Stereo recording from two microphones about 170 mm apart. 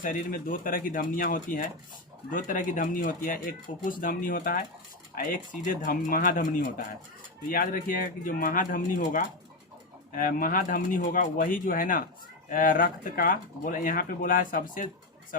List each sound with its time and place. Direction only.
0.0 s speech: 55° left (ahead or behind)